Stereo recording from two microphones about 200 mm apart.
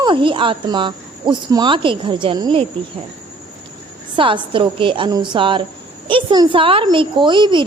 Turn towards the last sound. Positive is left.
turn(degrees=-25)  # may be behind; listen again after turning